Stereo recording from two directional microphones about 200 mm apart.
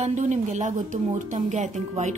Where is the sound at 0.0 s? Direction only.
35° right (ahead or behind).